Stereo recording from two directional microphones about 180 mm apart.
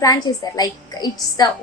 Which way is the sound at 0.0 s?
20° left (ahead or behind).